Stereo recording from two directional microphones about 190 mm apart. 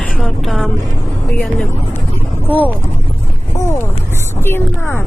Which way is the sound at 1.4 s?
5° left (ahead or behind).